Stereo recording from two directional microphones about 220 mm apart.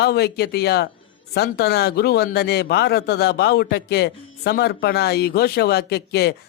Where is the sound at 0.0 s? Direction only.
45° left (ahead or behind).